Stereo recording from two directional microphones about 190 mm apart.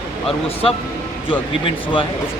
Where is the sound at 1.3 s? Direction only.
25° left (ahead or behind).